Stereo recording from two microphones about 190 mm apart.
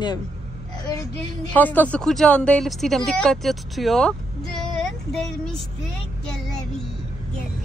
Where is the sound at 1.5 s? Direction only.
10° left (ahead or behind).